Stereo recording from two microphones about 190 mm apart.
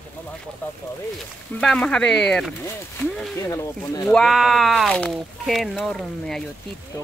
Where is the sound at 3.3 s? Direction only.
15° left (ahead or behind).